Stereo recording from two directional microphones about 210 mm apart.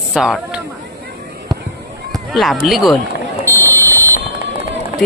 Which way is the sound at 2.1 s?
Centre (ahead or behind).